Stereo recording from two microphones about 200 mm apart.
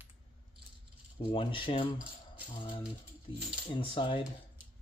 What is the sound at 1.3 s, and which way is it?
Speech, 25° left (ahead or behind).